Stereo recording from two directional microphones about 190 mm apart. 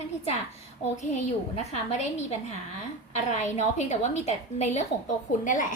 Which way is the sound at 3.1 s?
40° left (ahead or behind).